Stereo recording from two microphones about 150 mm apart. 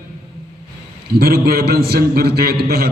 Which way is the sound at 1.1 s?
90° right.